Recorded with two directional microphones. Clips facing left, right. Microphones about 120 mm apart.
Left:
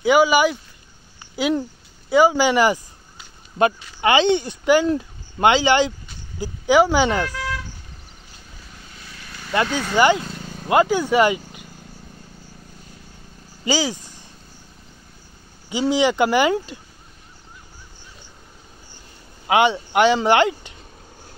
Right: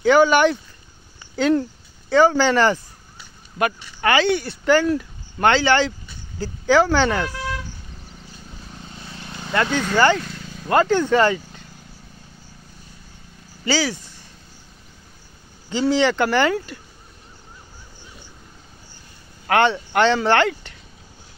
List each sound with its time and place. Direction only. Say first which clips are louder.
0.0 s speech: right 1 dB; 10° left (ahead or behind)
3.5 s speech: left 4 dB; 25° left (ahead or behind)
8.8 s vehicle: right 5 dB; 30° right (ahead or behind)
9.5 s speech: right 1 dB; 15° left (ahead or behind)
13.7 s speech: even; 15° left (ahead or behind)
15.7 s speech: even; 15° left (ahead or behind)
19.4 s speech: left 1 dB; 15° left (ahead or behind)